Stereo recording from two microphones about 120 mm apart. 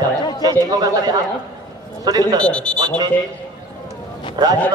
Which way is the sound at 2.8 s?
35° right (ahead or behind).